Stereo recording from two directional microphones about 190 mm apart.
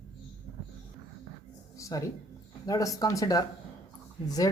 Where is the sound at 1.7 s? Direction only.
15° left (ahead or behind).